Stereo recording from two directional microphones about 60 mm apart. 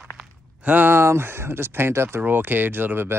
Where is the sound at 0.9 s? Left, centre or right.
Right.